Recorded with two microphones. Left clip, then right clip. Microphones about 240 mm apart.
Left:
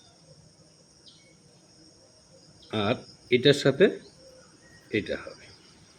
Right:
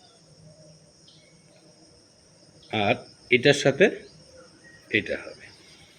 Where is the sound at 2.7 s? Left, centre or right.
Centre.